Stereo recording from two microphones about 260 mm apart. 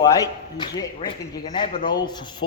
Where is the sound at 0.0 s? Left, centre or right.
Centre.